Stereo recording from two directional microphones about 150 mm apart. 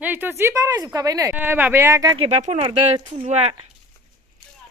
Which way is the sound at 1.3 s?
10° right (ahead or behind).